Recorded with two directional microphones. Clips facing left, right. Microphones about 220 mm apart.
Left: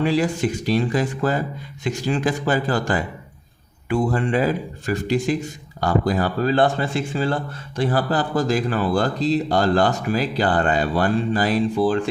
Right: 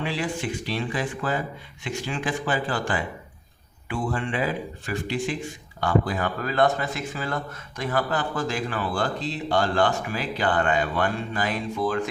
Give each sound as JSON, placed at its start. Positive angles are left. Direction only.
{"t": 0.0, "sound": "a man's voice", "side_deg": 40}